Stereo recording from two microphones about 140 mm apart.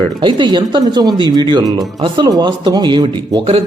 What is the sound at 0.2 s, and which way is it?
A man's voice, 35° right (ahead or behind).